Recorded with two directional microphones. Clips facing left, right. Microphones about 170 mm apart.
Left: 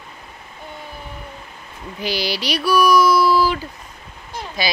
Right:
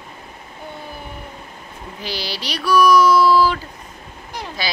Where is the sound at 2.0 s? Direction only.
15° left (ahead or behind).